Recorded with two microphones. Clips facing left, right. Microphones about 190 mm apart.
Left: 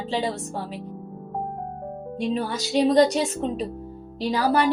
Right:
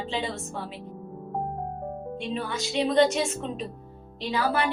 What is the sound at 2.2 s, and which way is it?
Speech, 40° left (ahead or behind).